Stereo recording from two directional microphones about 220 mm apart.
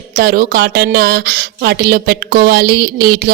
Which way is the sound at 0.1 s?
40° right (ahead or behind).